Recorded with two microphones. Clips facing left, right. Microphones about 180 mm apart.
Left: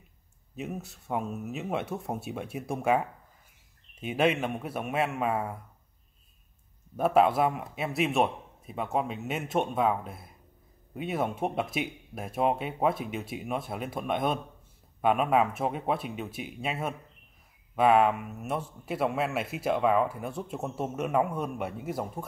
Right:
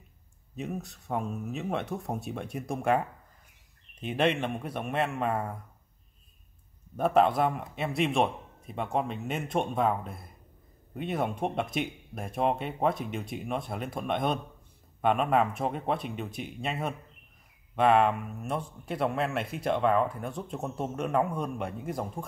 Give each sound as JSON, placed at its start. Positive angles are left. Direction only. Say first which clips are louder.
{"t": 0.6, "sound": "a man's voice", "louder": "right 1 dB", "side_deg": 5}
{"t": 7.0, "sound": "a man's voice", "louder": "left 1 dB", "side_deg": 5}